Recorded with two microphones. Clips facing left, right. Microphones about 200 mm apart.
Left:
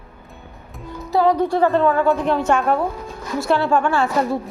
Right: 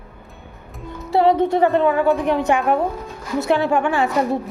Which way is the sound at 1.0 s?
25° right (ahead or behind).